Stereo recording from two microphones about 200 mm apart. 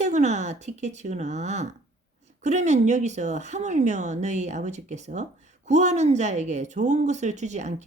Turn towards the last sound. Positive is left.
turn(degrees=-35)  # may be behind; listen again after turning